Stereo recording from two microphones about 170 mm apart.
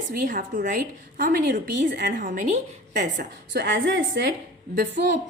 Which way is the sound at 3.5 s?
90° right.